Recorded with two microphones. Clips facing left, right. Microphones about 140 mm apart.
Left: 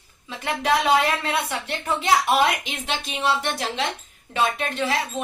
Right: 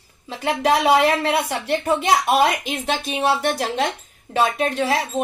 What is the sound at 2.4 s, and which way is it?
Speech, 45° right (ahead or behind).